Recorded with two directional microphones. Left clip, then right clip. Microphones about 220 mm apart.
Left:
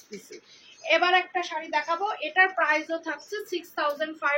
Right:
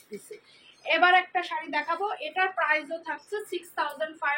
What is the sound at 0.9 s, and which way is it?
A woman's voice, 10° left (ahead or behind).